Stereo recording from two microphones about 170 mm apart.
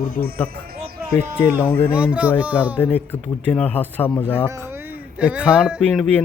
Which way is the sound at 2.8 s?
10° left (ahead or behind).